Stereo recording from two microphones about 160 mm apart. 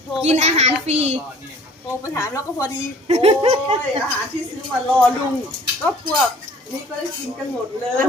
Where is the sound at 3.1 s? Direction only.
40° right (ahead or behind).